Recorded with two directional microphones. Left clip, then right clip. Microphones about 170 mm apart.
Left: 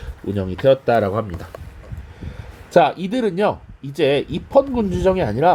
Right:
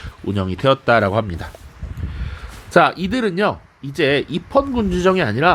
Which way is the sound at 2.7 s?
35° right (ahead or behind).